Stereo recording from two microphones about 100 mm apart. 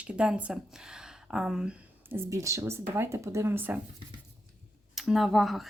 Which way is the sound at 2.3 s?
30° right (ahead or behind).